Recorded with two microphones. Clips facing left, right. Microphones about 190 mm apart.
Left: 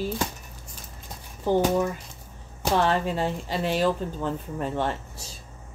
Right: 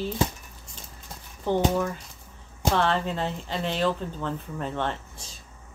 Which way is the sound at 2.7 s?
10° left (ahead or behind).